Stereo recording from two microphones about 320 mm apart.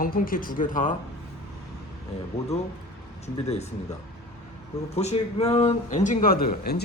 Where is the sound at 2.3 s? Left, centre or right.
Centre.